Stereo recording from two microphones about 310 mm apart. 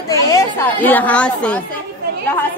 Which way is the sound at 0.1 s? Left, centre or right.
Centre.